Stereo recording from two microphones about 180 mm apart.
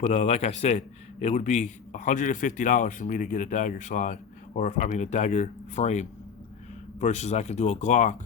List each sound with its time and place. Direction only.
0.0 s a man's voice: 40° left (ahead or behind)